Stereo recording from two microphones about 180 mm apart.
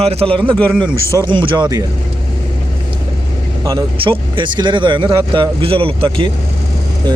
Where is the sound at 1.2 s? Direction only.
25° right (ahead or behind).